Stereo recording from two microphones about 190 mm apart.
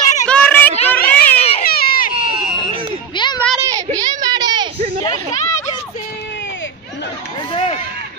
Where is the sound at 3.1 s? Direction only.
25° left (ahead or behind).